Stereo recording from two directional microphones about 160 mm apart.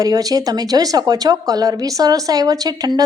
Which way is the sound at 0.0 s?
20° right (ahead or behind).